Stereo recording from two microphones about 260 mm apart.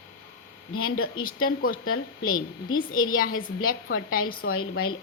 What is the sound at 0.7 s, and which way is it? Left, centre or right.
Speech, left.